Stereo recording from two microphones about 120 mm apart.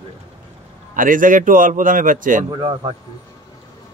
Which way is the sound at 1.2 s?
90° right.